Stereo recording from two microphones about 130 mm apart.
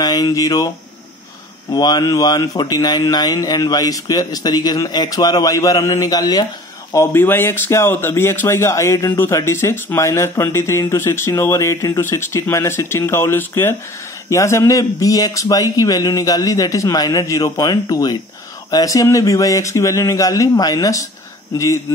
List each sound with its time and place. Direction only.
0.0 s speech: 30° left (ahead or behind)
1.7 s speech: 35° left (ahead or behind)
6.9 s speech: 20° left (ahead or behind)